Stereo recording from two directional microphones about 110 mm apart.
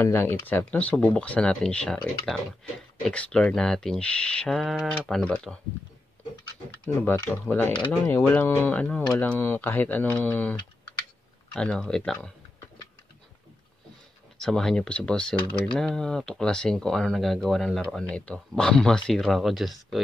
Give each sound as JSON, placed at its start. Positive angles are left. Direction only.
{"t": 0.0, "sound": "speech", "side_deg": 20}
{"t": 7.1, "sound": "speech", "side_deg": 20}
{"t": 11.5, "sound": "speech", "side_deg": 5}
{"t": 14.4, "sound": "speech", "side_deg": 5}